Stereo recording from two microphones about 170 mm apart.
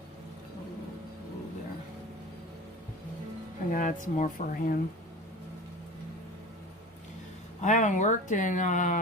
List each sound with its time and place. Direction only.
3.7 s speech: 50° left (ahead or behind)
7.6 s speech: 45° left (ahead or behind)